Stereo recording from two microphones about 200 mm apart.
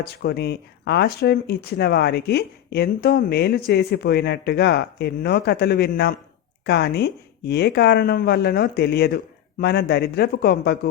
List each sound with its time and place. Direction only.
0.0 s speech: 55° left (ahead or behind)